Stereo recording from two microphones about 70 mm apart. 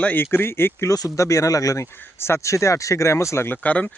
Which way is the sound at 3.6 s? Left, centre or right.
Centre.